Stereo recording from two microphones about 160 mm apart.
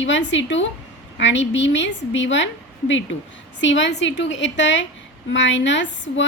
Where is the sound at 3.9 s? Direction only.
90° left.